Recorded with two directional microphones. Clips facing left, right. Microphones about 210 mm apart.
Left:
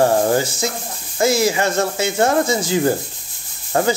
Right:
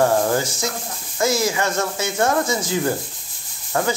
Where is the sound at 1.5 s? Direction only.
30° left (ahead or behind).